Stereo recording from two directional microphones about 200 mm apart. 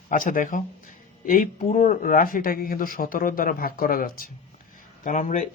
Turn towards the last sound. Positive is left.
turn(degrees=40)  # may be behind; listen again after turning